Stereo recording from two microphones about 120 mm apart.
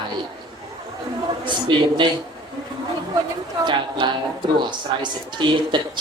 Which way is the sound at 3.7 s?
40° right (ahead or behind).